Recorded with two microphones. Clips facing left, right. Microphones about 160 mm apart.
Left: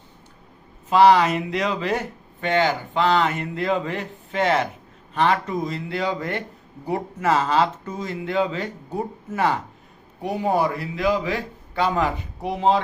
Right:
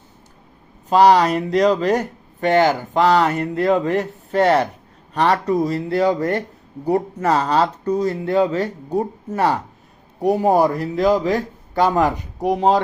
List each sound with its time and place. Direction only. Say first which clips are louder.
0.9 s a man's voice: right 2 dB; 40° right (ahead or behind)